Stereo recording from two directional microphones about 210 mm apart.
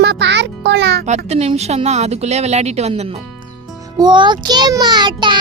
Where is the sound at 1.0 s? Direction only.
30° right (ahead or behind).